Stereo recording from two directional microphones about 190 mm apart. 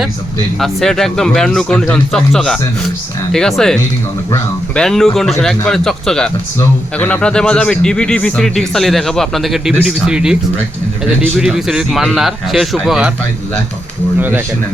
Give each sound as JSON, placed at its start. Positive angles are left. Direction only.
{"t": 0.6, "sound": "speech", "side_deg": 0}
{"t": 14.2, "sound": "speech", "side_deg": -10}